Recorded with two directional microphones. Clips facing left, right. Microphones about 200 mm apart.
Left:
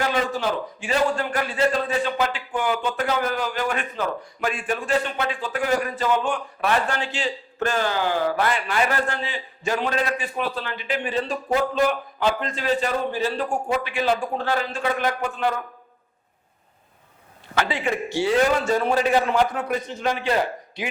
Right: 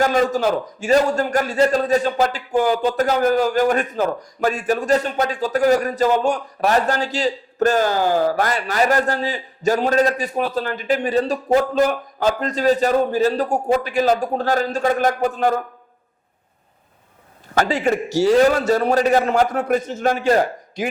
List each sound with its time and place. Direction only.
0.0 s a man's voice: 40° right (ahead or behind)
17.5 s a man's voice: 40° right (ahead or behind)